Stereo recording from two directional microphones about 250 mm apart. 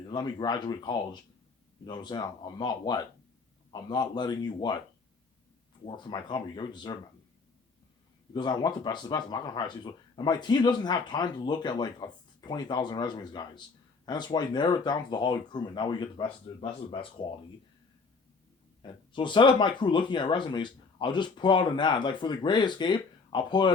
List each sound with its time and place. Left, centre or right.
0.0 s speech: centre
5.8 s speech: centre
8.3 s speech: centre
18.8 s speech: centre